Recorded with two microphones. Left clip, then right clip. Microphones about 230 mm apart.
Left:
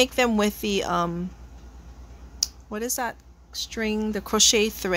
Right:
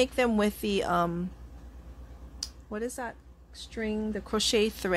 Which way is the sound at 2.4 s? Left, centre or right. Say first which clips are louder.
Left 6 dB; centre.